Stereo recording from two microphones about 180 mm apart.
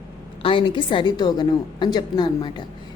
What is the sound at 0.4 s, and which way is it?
Speech, 25° left (ahead or behind).